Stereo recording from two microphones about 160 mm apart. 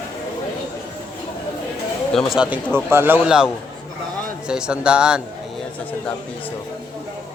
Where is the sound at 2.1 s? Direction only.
5° right (ahead or behind).